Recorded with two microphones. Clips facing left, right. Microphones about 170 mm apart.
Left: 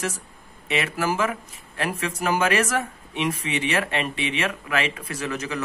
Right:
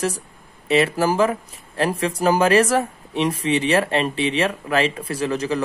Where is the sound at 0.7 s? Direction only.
35° right (ahead or behind).